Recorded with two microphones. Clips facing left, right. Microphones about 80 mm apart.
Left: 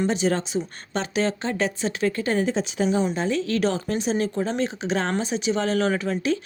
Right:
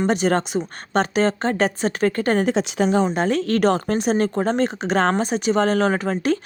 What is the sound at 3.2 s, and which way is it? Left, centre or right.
Speech, right.